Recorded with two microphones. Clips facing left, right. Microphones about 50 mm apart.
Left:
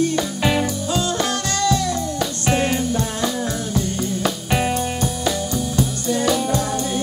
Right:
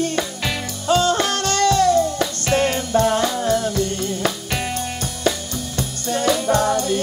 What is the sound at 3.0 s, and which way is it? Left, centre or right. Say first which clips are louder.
Music: right 6 dB; right.